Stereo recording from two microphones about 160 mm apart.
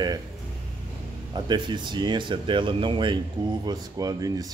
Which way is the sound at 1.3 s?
30° right (ahead or behind).